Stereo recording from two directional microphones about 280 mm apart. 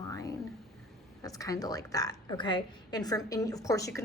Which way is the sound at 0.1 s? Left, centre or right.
Centre.